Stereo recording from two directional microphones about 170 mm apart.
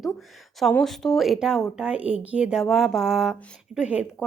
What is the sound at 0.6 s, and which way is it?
A woman's voice, 5° left (ahead or behind).